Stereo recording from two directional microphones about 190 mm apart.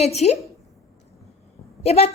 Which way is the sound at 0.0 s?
35° left (ahead or behind).